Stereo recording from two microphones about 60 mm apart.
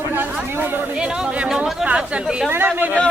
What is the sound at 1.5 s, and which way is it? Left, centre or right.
Speech, centre.